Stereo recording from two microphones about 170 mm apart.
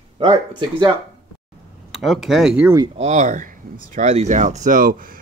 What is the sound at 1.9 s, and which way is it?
Speech, centre (ahead or behind).